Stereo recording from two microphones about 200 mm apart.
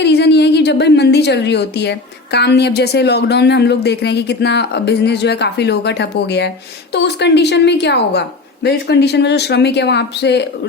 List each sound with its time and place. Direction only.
0.0 s a woman's voice: 55° left (ahead or behind)